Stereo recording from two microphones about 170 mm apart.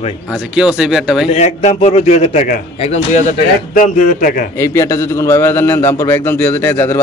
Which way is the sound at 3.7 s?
55° left (ahead or behind).